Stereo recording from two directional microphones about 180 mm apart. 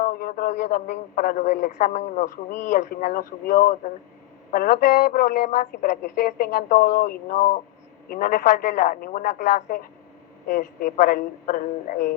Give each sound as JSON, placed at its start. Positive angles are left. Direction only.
{"t": 0.0, "sound": "radio", "side_deg": 50}
{"t": 1.1, "sound": "speech", "side_deg": 50}
{"t": 2.6, "sound": "speech", "side_deg": 50}
{"t": 7.3, "sound": "speech", "side_deg": 40}